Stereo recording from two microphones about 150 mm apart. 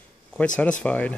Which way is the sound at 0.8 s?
10° left (ahead or behind).